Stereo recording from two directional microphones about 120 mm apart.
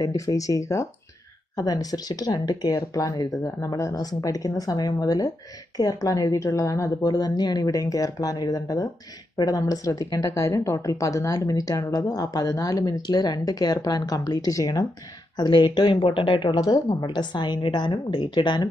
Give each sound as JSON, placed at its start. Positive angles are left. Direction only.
{"t": 0.0, "sound": "a woman's voice", "side_deg": 30}